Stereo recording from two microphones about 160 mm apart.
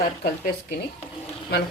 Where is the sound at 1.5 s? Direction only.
80° left.